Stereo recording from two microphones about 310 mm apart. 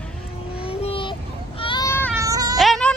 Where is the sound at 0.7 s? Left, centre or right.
Centre.